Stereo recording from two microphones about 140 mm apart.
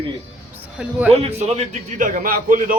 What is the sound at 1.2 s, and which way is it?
A man's voice, 60° right (ahead or behind).